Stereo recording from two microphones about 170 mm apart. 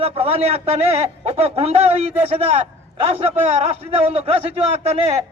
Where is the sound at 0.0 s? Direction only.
35° right (ahead or behind).